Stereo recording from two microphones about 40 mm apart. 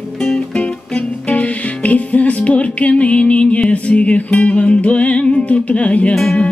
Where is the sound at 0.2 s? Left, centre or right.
Left.